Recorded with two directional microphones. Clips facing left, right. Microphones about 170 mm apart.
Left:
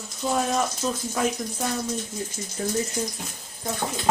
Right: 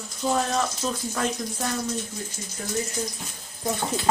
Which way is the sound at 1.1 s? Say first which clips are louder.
Left 2 dB; 10° left (ahead or behind).